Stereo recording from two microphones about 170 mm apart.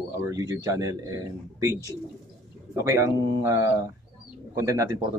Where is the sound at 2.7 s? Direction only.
15° right (ahead or behind).